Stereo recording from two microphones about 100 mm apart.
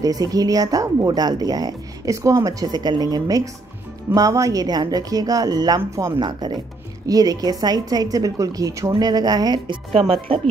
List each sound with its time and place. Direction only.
0.0 s speech: 40° right (ahead or behind)
6.1 s speech: 45° right (ahead or behind)
9.9 s speech: 70° right (ahead or behind)